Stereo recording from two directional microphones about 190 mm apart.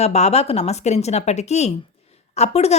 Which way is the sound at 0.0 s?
35° left (ahead or behind).